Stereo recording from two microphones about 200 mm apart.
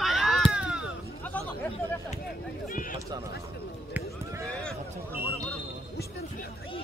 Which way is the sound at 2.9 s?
20° right (ahead or behind).